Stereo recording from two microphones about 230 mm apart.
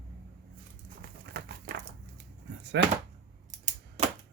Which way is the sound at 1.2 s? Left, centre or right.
Right.